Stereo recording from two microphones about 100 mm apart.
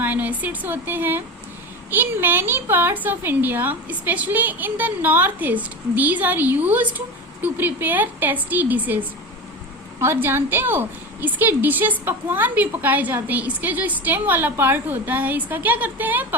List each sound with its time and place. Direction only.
0.0 s a woman's voice: 15° right (ahead or behind)